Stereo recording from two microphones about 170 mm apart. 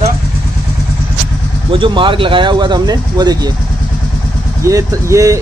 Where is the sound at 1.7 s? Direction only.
30° right (ahead or behind).